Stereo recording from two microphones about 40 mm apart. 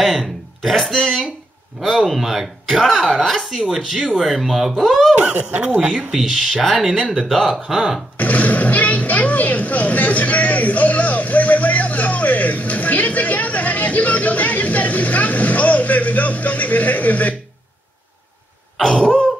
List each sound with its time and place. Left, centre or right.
0.0 s a sound: centre
0.6 s speech: centre
2.8 s speech: centre
5.8 s speech: right
6.1 s speech: centre
8.2 s roar: left
18.8 s throat clearing: centre